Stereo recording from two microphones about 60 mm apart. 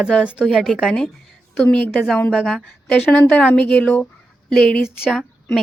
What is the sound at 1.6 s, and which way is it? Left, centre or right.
Speech, left.